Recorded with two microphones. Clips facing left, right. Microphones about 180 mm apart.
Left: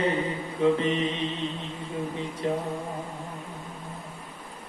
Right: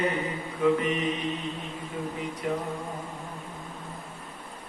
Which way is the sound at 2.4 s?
30° left (ahead or behind).